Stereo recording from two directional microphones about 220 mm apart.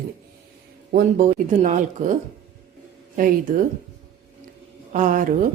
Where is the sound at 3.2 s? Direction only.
40° right (ahead or behind).